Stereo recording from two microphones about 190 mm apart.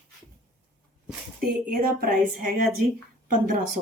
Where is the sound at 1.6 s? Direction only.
50° right (ahead or behind).